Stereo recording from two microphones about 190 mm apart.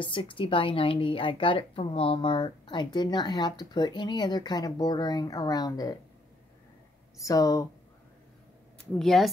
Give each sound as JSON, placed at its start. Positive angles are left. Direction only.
{"t": 0.0, "sound": "a woman's voice", "side_deg": 25}
{"t": 7.2, "sound": "speech", "side_deg": 15}
{"t": 8.9, "sound": "speech", "side_deg": 0}